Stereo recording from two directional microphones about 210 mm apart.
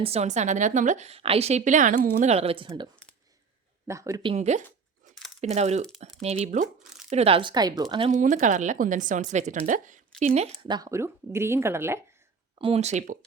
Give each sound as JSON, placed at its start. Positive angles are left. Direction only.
{"t": 0.0, "sound": "a woman's voice", "side_deg": -30}
{"t": 8.1, "sound": "a woman's voice", "side_deg": -35}
{"t": 10.6, "sound": "speech", "side_deg": -20}
{"t": 12.5, "sound": "a woman's voice", "side_deg": -25}